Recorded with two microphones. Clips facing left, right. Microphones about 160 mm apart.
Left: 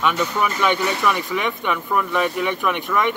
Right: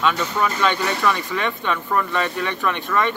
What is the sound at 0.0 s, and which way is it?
Speech, 10° left (ahead or behind).